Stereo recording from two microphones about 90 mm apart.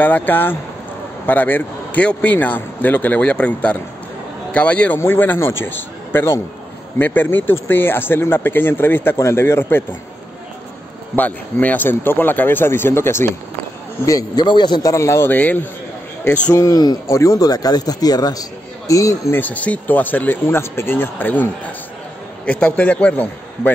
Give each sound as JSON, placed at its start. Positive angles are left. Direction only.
{"t": 0.0, "sound": "speech", "side_deg": 20}
{"t": 11.1, "sound": "speech", "side_deg": 20}
{"t": 14.0, "sound": "speech", "side_deg": 45}
{"t": 14.9, "sound": "speech", "side_deg": 35}
{"t": 15.2, "sound": "speech", "side_deg": 20}
{"t": 16.5, "sound": "speech", "side_deg": 45}
{"t": 19.3, "sound": "speech", "side_deg": 15}
{"t": 22.5, "sound": "a man's voice", "side_deg": 15}